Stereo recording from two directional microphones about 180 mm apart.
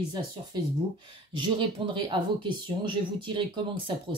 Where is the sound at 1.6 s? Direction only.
30° right (ahead or behind).